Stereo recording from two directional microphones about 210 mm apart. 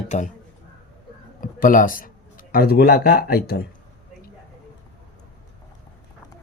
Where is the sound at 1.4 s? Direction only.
40° left (ahead or behind).